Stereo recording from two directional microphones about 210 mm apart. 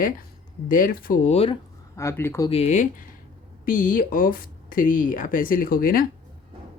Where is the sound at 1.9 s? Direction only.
10° left (ahead or behind).